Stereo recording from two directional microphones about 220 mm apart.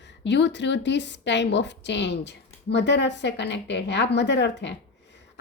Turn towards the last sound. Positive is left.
turn(degrees=50)  # may be behind; listen again after turning